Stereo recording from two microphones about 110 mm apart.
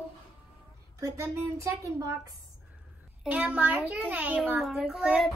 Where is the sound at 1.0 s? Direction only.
30° right (ahead or behind).